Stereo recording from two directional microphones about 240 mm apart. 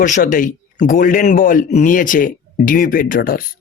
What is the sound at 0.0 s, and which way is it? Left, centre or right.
Speech, left.